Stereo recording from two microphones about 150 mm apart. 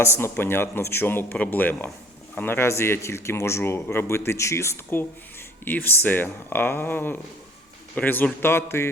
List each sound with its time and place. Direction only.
0.2 s speech: 15° left (ahead or behind)